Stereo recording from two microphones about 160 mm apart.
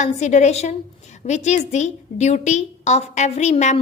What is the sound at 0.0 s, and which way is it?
A woman's voice, 45° left (ahead or behind).